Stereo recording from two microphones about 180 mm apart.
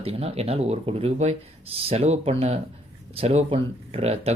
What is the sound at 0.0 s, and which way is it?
Speech, 35° right (ahead or behind).